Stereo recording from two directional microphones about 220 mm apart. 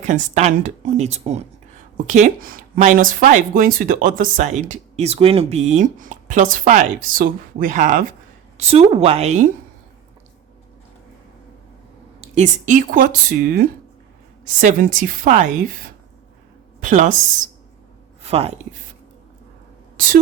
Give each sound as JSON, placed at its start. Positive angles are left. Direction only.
{"t": 0.0, "sound": "a woman's voice", "side_deg": -35}
{"t": 12.2, "sound": "speech", "side_deg": -30}
{"t": 16.8, "sound": "speech", "side_deg": -35}